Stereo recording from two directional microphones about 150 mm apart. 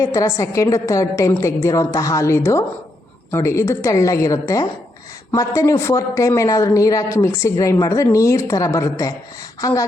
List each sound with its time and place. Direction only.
0.0 s speech: 20° left (ahead or behind)